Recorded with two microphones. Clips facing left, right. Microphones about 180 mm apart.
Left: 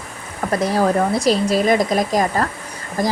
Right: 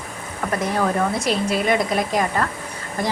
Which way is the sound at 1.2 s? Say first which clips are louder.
Left 6 dB; 40° left (ahead or behind).